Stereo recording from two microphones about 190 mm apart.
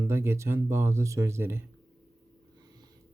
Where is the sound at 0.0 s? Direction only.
15° right (ahead or behind).